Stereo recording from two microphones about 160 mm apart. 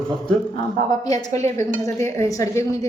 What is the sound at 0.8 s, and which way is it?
Speech, 25° left (ahead or behind).